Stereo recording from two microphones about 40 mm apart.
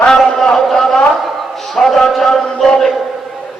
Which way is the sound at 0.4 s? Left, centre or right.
Centre.